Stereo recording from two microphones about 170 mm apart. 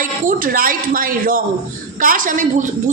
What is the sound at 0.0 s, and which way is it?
A woman's voice, 55° right (ahead or behind).